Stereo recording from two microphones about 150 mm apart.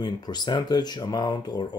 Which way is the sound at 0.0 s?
30° left (ahead or behind).